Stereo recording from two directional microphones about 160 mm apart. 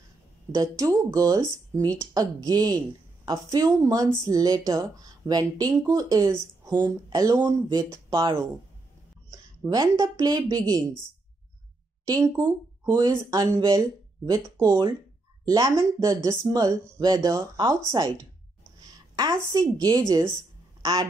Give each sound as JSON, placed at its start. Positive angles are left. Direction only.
{"t": 0.5, "sound": "a woman's voice", "side_deg": -20}
{"t": 12.0, "sound": "a woman's voice", "side_deg": -20}